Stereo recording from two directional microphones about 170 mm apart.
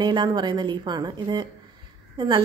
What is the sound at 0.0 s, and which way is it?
A woman's voice, 25° right (ahead or behind).